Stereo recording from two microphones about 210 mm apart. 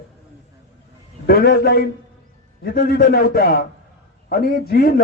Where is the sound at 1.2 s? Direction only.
45° left (ahead or behind).